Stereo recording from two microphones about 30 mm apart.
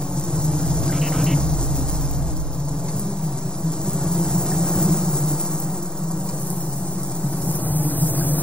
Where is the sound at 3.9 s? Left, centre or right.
Centre.